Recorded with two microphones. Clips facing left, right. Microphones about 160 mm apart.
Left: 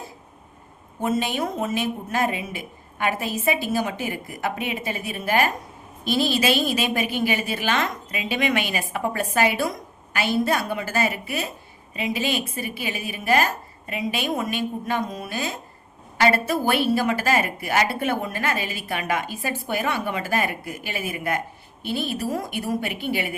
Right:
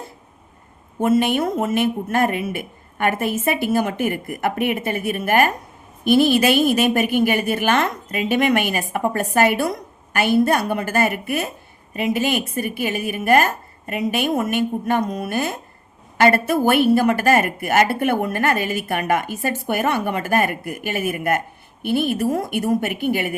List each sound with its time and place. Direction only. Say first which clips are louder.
1.2 s a woman's voice: right 6 dB; 60° right (ahead or behind)
15.0 s a woman's voice: right 6 dB; 65° right (ahead or behind)